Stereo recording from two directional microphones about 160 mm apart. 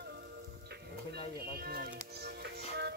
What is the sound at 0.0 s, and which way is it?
Music, 90° right.